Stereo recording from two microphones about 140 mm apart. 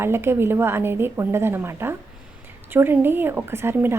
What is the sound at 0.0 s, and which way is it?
A woman's voice, 15° right (ahead or behind).